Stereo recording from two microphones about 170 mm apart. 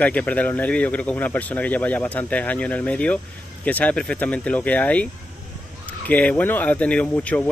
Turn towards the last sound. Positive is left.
turn(degrees=10)  # may be behind; listen again after turning